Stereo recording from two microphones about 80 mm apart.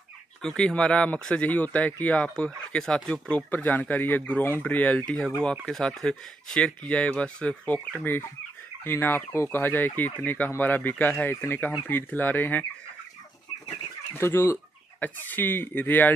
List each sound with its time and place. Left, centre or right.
0.4 s speech: centre
14.1 s speech: left